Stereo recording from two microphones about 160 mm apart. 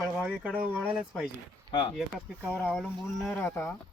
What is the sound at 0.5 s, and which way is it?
Speech, 5° right (ahead or behind).